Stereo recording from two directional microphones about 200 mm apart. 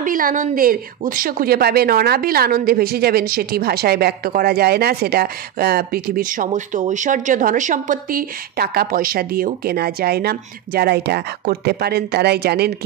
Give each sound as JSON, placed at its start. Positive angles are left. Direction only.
{"t": 0.0, "sound": "a woman's voice", "side_deg": -45}